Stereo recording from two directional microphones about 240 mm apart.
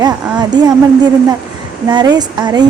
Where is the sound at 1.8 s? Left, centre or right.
Centre.